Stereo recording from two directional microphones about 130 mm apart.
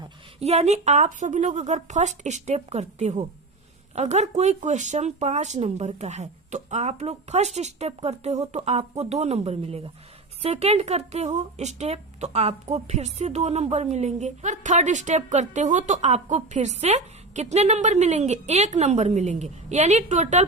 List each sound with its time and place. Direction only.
0.3 s a woman's voice: 55° right (ahead or behind)